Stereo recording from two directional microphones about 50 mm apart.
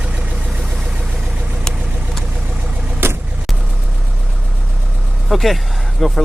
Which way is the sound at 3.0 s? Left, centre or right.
Right.